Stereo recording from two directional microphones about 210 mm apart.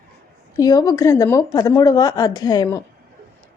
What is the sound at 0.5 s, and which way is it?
A woman's voice, 20° left (ahead or behind).